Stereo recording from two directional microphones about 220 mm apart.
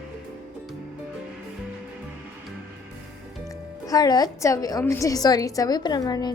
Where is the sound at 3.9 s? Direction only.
15° left (ahead or behind).